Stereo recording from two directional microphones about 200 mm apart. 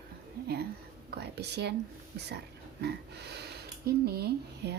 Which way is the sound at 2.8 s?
55° right (ahead or behind).